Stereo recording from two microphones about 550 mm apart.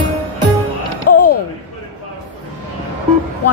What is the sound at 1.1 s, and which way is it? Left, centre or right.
Mechanisms, left.